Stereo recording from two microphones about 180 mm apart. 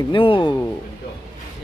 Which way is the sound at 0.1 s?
30° left (ahead or behind).